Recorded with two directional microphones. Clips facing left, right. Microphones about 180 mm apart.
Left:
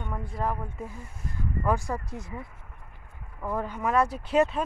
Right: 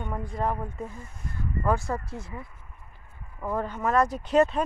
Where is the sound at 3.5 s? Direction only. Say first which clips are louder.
Right 1 dB; 10° left (ahead or behind).